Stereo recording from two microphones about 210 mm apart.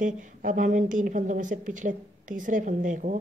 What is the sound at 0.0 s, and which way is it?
A woman's voice, 40° right (ahead or behind).